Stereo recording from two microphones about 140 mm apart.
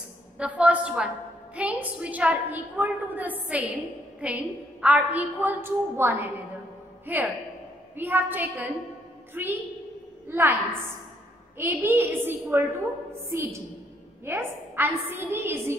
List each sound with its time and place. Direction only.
0.4 s a woman's voice: 10° right (ahead or behind)